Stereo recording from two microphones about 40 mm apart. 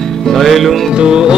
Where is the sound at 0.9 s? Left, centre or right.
Centre.